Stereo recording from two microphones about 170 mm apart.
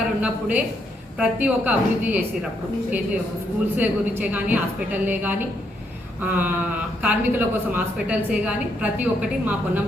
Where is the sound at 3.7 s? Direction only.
10° right (ahead or behind).